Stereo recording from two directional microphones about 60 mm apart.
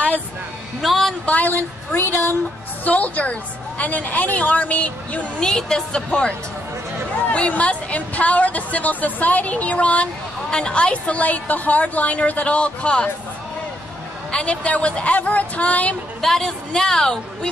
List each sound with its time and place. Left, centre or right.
0.7 s a woman's voice: centre
1.2 s a woman's voice: left
2.8 s a woman's voice: left
5.4 s a woman's voice: centre
14.3 s a woman's voice: centre
16.2 s a woman's voice: centre